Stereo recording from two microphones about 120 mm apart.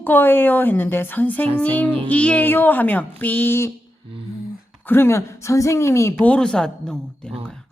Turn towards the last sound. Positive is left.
turn(degrees=5)  # may be behind; listen again after turning